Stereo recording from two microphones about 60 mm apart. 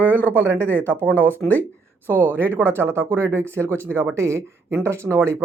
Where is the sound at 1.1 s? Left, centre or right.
Left.